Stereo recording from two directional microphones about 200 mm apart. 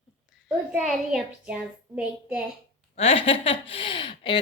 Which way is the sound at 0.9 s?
Centre (ahead or behind).